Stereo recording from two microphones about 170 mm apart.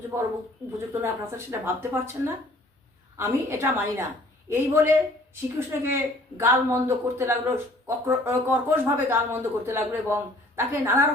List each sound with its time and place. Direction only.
0.1 s speech: 15° right (ahead or behind)